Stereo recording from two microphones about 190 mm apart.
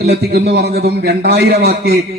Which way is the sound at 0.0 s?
55° right (ahead or behind).